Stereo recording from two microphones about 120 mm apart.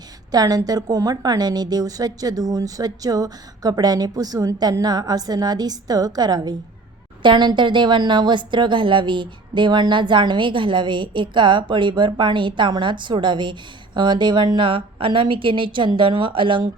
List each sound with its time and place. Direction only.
0.3 s a woman's voice: 30° right (ahead or behind)